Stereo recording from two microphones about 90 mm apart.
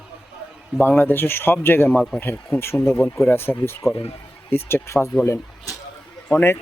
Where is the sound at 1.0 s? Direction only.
25° left (ahead or behind).